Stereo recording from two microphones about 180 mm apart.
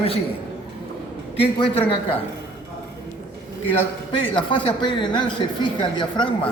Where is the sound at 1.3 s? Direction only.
30° left (ahead or behind).